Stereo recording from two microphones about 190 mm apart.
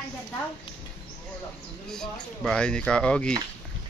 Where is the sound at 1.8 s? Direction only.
5° left (ahead or behind).